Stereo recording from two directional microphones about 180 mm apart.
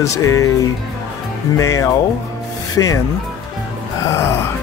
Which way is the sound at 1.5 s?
15° left (ahead or behind).